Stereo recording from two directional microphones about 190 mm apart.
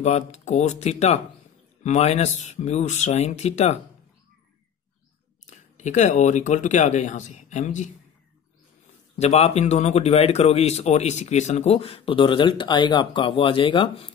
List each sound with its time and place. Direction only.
0.0 s speech: 35° left (ahead or behind)
5.5 s speech: 40° left (ahead or behind)
9.2 s speech: 35° left (ahead or behind)